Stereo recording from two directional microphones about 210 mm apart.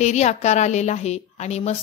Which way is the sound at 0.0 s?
35° left (ahead or behind).